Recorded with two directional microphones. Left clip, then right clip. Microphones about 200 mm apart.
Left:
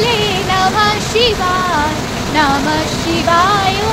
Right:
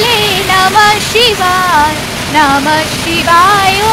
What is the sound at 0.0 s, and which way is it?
Music, 20° right (ahead or behind).